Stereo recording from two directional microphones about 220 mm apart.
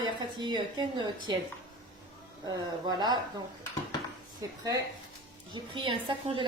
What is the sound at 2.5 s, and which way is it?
A woman's voice, 20° right (ahead or behind).